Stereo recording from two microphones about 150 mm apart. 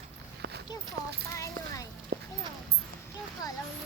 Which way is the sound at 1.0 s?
85° right.